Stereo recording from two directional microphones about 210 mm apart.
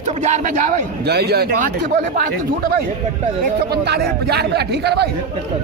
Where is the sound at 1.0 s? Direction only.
50° right (ahead or behind).